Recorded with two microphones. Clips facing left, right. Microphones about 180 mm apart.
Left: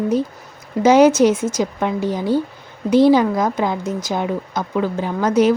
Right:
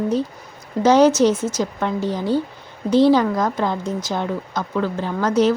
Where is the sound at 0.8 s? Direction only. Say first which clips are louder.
Left 2 dB; 10° left (ahead or behind).